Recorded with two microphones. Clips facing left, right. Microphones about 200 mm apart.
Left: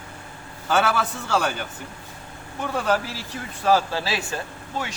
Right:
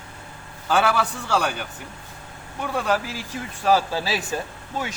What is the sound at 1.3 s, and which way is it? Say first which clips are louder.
Speech: left 1 dB; centre (ahead or behind).